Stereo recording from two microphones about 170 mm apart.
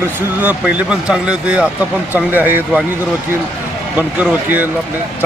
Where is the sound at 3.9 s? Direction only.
10° right (ahead or behind).